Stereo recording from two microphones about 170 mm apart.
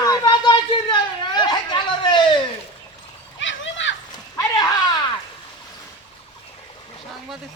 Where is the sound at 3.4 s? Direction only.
90° left.